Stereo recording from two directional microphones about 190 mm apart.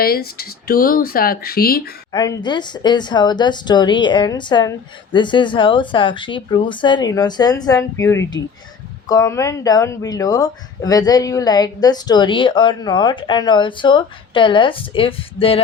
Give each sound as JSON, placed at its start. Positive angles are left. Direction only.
{"t": 0.0, "sound": "speech", "side_deg": 55}
{"t": 2.1, "sound": "speech", "side_deg": 20}